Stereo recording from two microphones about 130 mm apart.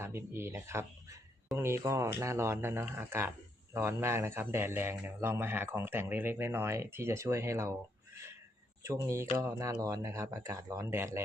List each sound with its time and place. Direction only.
0.0 s speech: 20° right (ahead or behind)